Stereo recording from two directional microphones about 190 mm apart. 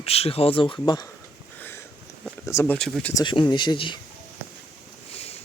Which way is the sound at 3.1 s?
25° left (ahead or behind).